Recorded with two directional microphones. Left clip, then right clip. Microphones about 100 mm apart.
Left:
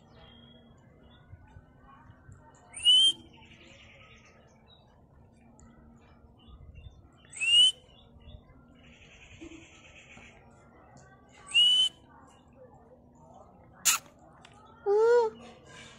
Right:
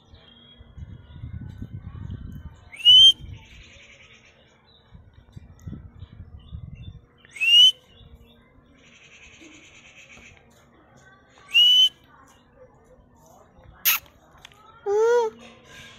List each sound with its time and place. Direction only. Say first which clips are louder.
2.7 s whistle: right 9 dB; 20° left (ahead or behind)
7.3 s whistle: right 7 dB; 15° left (ahead or behind)
11.4 s whistle: right 7 dB; 20° left (ahead or behind)
13.8 s a sound: right 4 dB; 20° left (ahead or behind)
14.9 s babbling: right 3 dB; 15° left (ahead or behind)